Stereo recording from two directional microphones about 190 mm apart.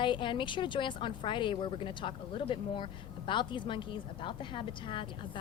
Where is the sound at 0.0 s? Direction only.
25° left (ahead or behind).